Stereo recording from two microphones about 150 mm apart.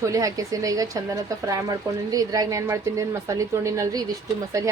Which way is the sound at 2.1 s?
25° right (ahead or behind).